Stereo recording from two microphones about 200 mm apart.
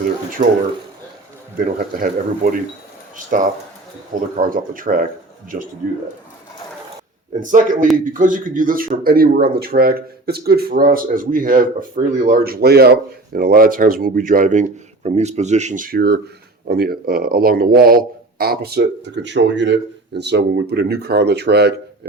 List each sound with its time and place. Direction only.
1.5 s a man's voice: 45° right (ahead or behind)
7.3 s a man's voice: 40° right (ahead or behind)